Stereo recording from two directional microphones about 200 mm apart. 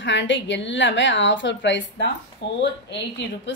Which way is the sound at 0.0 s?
65° left (ahead or behind).